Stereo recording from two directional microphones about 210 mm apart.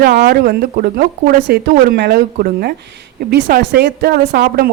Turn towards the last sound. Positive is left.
turn(degrees=-45)  # may be behind; listen again after turning